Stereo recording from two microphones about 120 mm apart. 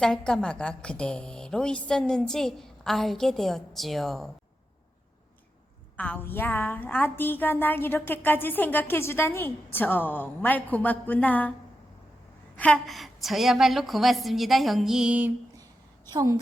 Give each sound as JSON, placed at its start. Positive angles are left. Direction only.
{"t": 0.0, "sound": "a woman's voice", "side_deg": 5}
{"t": 6.0, "sound": "a woman's voice", "side_deg": 15}
{"t": 12.5, "sound": "a woman's voice", "side_deg": 10}